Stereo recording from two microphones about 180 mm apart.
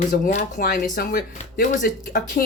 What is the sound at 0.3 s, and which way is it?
Speech, 45° left (ahead or behind).